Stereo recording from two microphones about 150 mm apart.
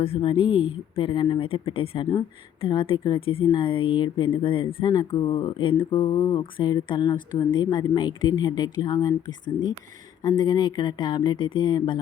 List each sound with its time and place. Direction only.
0.0 s a woman's voice: 40° left (ahead or behind)